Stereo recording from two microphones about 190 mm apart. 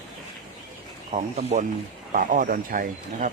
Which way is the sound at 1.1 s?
35° right (ahead or behind).